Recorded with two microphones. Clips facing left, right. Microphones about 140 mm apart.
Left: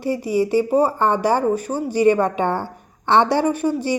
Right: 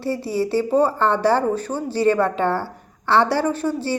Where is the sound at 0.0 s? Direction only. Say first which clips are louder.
Left 3 dB; 15° left (ahead or behind).